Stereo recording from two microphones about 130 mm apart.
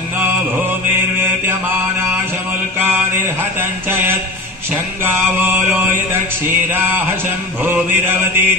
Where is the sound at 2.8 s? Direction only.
15° right (ahead or behind).